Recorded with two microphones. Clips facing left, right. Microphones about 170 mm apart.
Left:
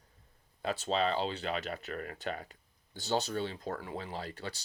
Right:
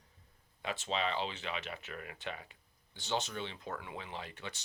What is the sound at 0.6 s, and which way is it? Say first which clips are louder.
Speech: left 5 dB; 35° left (ahead or behind).